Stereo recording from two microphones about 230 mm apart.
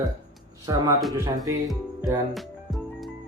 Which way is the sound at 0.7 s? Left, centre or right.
Centre.